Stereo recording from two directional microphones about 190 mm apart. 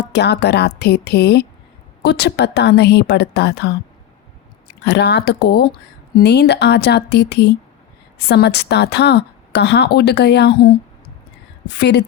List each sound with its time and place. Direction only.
0.1 s a woman's voice: 60° left (ahead or behind)
4.8 s a woman's voice: 65° left (ahead or behind)
11.8 s a woman's voice: 65° left (ahead or behind)